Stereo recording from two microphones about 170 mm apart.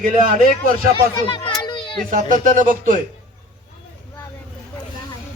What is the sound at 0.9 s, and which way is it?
Speech, 30° left (ahead or behind).